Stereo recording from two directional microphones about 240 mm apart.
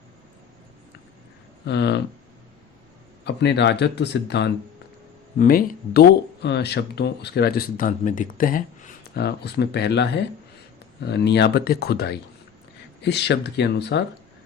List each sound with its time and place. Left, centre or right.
1.6 s speech: left
3.2 s speech: left